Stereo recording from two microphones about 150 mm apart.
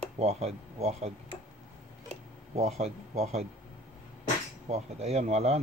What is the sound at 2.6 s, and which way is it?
Speech, 45° right (ahead or behind).